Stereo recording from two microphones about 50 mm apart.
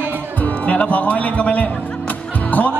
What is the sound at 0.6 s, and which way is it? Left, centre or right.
Speech, left.